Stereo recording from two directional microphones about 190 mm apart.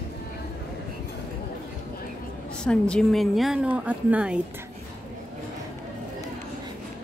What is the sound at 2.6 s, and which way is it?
Speech, 5° left (ahead or behind).